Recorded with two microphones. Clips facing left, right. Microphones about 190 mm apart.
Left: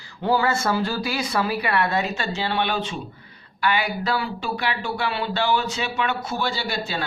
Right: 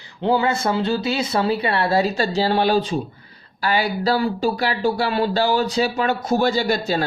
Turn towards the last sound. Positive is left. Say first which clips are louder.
# right 8 dB
turn(degrees=-45)  # may be behind; listen again after turning